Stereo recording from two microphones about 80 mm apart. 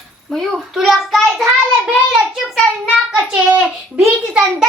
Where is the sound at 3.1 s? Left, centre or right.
Centre.